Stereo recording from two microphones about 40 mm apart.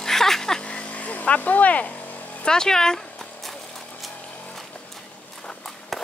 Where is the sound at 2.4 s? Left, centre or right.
Centre.